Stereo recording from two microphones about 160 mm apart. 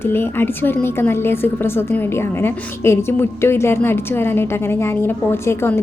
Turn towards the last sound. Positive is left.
turn(degrees=15)  # may be behind; listen again after turning